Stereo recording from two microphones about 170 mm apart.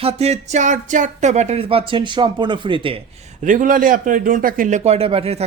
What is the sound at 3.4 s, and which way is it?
A man's voice, 50° right (ahead or behind).